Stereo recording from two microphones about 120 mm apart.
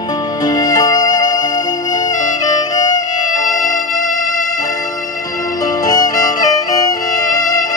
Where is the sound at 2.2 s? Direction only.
90° left.